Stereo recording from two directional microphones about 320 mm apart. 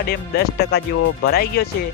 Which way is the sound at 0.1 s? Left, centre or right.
Left.